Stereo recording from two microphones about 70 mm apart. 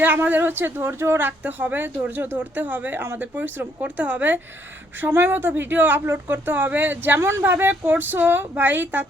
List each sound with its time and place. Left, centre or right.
0.0 s speech: right
4.9 s speech: right